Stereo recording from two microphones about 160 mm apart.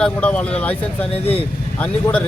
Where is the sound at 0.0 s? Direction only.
5° left (ahead or behind).